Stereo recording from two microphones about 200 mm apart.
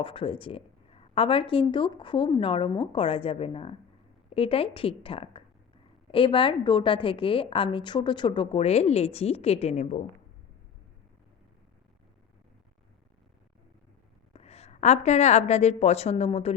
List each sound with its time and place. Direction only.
0.0 s a woman's voice: 25° left (ahead or behind)
14.3 s a woman's voice: 30° left (ahead or behind)